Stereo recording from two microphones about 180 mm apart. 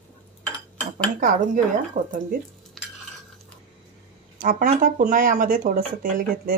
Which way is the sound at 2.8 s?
Centre (ahead or behind).